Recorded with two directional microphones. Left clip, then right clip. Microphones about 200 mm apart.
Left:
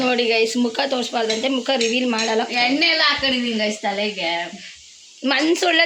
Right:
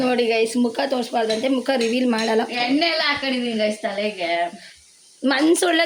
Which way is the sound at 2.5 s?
55° left (ahead or behind).